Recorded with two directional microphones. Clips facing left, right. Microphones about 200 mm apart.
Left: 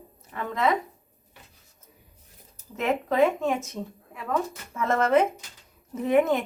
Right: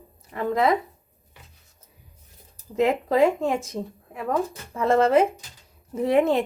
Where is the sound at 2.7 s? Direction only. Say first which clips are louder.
Right 4 dB; 30° right (ahead or behind).